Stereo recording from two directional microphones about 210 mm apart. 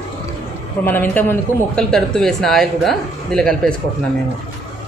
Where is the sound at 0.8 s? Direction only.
10° left (ahead or behind).